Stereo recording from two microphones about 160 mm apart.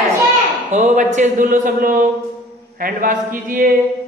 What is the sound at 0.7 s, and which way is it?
Speech, 50° right (ahead or behind).